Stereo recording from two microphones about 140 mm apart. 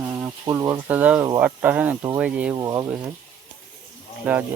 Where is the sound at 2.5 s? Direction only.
25° right (ahead or behind).